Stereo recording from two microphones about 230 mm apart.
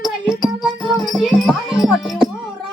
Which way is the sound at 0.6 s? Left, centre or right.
Centre.